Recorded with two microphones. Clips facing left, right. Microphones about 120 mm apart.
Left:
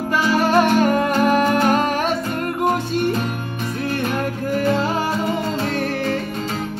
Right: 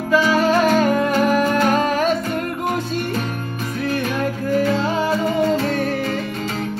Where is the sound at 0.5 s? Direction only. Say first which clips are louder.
Left 3 dB; 50° left (ahead or behind).